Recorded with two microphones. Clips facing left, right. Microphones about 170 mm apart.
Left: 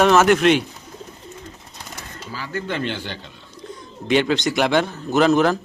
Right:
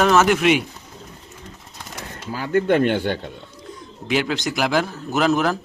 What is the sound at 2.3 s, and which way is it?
Speech, 55° right (ahead or behind).